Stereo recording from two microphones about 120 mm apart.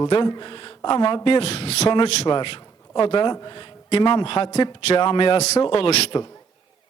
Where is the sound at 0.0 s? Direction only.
45° left (ahead or behind).